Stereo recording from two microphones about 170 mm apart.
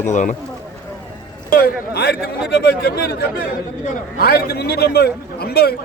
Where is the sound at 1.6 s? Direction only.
70° left (ahead or behind).